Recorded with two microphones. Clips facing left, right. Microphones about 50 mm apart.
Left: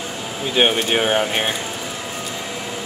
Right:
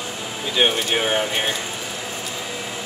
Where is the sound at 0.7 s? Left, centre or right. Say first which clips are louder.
Left 3 dB; centre.